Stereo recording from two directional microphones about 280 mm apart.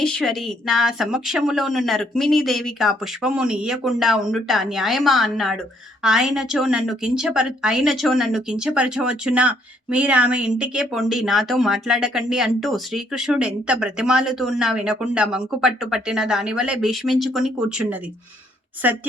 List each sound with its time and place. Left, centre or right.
0.0 s a woman's voice: centre